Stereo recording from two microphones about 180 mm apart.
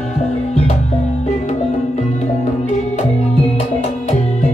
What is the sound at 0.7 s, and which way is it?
Music, 40° left (ahead or behind).